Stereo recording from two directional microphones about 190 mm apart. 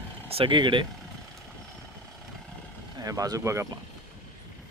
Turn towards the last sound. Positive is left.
turn(degrees=-15)  # may be behind; listen again after turning